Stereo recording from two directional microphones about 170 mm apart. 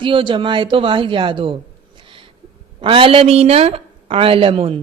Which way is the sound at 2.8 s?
30° right (ahead or behind).